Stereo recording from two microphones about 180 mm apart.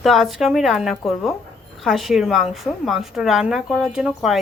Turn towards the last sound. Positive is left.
turn(degrees=-5)  # may be behind; listen again after turning